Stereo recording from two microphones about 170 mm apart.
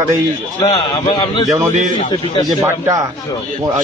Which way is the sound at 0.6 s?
25° left (ahead or behind).